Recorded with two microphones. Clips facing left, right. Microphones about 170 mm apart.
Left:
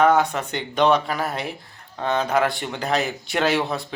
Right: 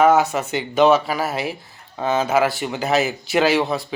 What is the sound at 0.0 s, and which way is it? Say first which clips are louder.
Speech: right 2 dB; 5° right (ahead or behind).